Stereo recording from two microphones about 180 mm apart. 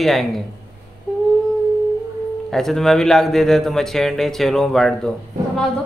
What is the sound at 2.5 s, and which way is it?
A man's voice, centre (ahead or behind).